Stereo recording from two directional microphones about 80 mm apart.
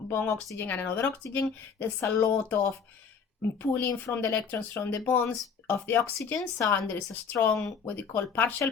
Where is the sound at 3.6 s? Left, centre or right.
Left.